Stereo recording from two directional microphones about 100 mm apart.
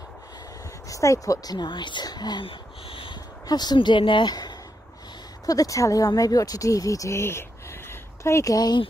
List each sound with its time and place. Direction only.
0.8 s speech: 30° left (ahead or behind)
2.4 s a sound: 65° left (ahead or behind)
3.4 s speech: 45° left (ahead or behind)